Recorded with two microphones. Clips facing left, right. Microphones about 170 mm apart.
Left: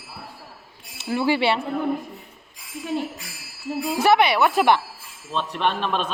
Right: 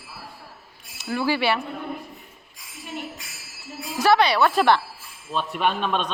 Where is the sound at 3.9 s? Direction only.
20° left (ahead or behind).